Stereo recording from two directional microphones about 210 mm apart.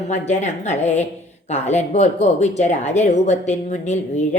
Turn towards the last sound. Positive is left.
turn(degrees=35)  # may be behind; listen again after turning